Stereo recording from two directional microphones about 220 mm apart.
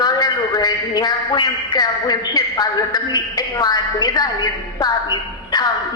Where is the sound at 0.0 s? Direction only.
20° left (ahead or behind).